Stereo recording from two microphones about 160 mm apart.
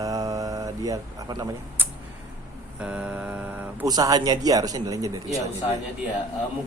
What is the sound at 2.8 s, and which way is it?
Mantra, 5° right (ahead or behind).